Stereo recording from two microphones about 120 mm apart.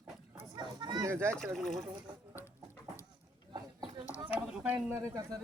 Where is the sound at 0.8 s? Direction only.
35° right (ahead or behind).